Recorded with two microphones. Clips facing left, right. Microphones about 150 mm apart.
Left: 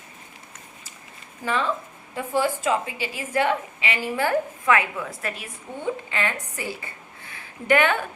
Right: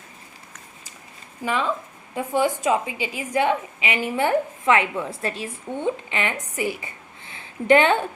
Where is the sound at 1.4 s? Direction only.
15° right (ahead or behind).